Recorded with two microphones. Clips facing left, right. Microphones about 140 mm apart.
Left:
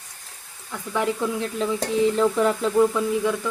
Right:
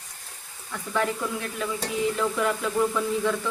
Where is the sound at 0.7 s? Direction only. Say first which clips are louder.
Left 2 dB; 15° left (ahead or behind).